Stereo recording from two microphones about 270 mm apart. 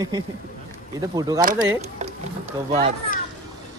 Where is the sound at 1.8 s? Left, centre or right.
Right.